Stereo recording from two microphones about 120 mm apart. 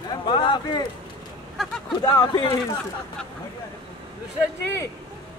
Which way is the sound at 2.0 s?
35° left (ahead or behind).